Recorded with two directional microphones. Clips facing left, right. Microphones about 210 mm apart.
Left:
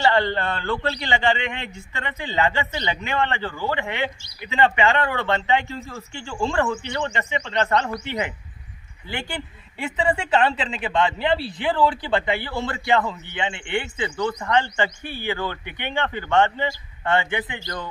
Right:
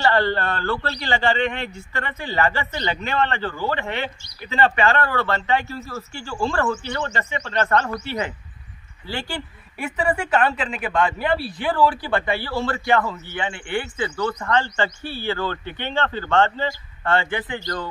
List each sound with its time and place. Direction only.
0.0 s a man's voice: 15° left (ahead or behind)